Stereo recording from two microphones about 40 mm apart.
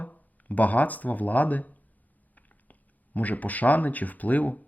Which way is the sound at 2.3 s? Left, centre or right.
Left.